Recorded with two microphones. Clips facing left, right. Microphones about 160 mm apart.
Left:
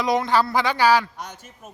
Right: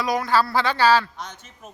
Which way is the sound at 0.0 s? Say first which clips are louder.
Left 1 dB; 20° left (ahead or behind).